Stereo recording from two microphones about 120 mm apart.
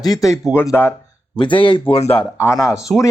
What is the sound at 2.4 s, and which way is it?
Speech, 25° left (ahead or behind).